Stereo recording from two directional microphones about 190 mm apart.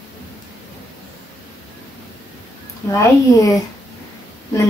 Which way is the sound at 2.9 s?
15° left (ahead or behind).